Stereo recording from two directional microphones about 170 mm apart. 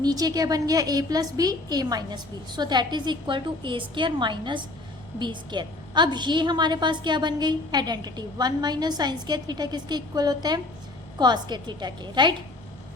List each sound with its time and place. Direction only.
0.0 s a woman's voice: 25° right (ahead or behind)